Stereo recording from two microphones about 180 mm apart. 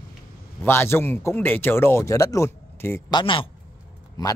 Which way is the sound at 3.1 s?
30° left (ahead or behind).